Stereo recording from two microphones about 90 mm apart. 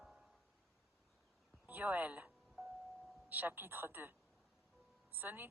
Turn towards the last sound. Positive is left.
turn(degrees=-25)  # may be behind; listen again after turning